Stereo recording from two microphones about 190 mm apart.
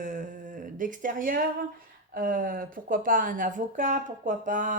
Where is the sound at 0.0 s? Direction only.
40° right (ahead or behind).